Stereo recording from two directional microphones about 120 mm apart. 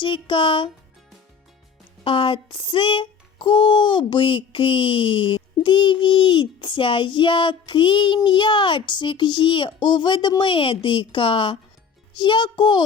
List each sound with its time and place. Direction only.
0.0 s a child's voice: 45° left (ahead or behind)
2.0 s a child's voice: 45° left (ahead or behind)